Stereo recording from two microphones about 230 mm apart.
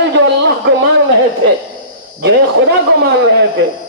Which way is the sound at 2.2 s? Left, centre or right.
Right.